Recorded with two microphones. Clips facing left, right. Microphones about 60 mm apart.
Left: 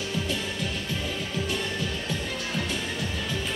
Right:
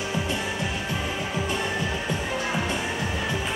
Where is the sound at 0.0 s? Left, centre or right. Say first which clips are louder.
Right 2 dB; centre.